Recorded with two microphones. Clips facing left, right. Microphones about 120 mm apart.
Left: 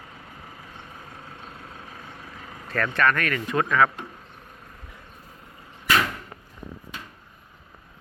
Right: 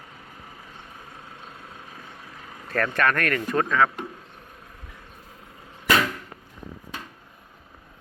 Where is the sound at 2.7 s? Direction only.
45° right (ahead or behind).